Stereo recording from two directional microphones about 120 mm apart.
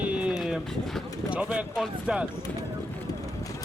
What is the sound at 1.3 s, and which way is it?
Speech, 10° right (ahead or behind).